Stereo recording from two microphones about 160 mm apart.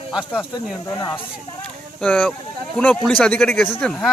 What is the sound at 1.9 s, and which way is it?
Speech, 10° left (ahead or behind).